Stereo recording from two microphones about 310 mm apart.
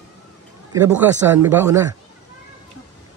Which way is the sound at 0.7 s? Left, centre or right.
Centre.